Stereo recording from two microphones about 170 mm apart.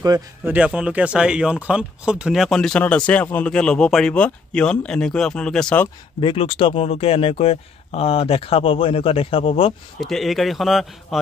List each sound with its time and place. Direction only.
0.5 s speech: 5° right (ahead or behind)
6.2 s speech: 35° left (ahead or behind)
9.9 s speech: centre (ahead or behind)